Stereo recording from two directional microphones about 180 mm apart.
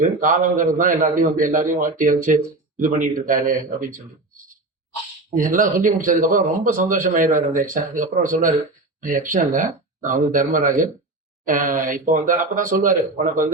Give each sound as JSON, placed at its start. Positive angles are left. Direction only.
{"t": 0.0, "sound": "speech", "side_deg": -45}
{"t": 5.3, "sound": "speech", "side_deg": -50}